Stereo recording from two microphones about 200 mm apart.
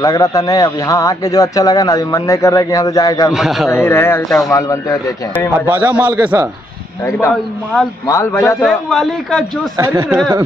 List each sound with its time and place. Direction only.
0.0 s speech: 20° left (ahead or behind)
3.3 s speech: centre (ahead or behind)
3.7 s speech: 10° left (ahead or behind)
5.7 s a man's voice: 10° right (ahead or behind)
7.1 s speech: 15° left (ahead or behind)
8.6 s speech: centre (ahead or behind)
9.8 s a man's voice: 10° right (ahead or behind)